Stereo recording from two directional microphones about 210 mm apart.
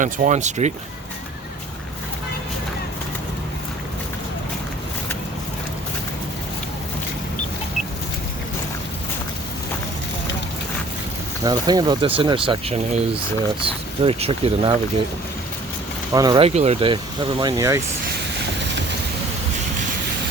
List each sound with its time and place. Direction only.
0.0 s speech: 35° right (ahead or behind)
11.4 s speech: 20° right (ahead or behind)
16.1 s speech: 20° right (ahead or behind)